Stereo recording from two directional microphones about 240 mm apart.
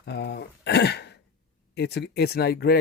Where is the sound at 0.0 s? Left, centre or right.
Left.